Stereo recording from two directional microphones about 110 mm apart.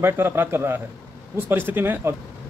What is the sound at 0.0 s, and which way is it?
Speech, 20° right (ahead or behind).